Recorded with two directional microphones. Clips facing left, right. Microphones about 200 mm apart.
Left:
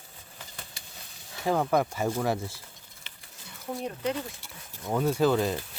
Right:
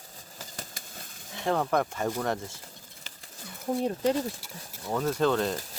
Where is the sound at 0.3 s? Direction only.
40° right (ahead or behind).